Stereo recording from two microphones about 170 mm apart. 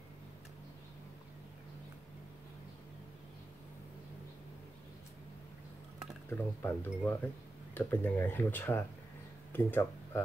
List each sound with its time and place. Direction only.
6.3 s speech: 10° left (ahead or behind)